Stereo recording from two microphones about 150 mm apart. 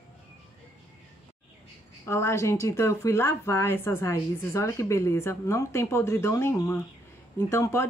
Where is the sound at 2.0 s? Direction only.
20° left (ahead or behind).